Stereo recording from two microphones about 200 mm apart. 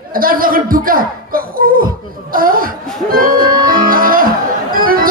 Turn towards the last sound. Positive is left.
turn(degrees=-45)  # may be behind; listen again after turning